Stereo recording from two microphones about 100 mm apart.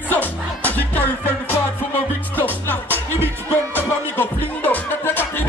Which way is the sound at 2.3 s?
20° left (ahead or behind).